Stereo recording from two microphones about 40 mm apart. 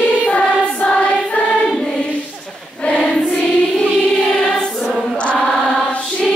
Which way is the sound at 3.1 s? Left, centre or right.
Left.